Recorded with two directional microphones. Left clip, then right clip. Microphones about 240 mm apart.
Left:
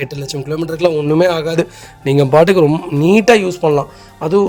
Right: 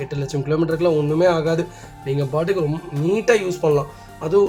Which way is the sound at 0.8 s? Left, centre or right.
Left.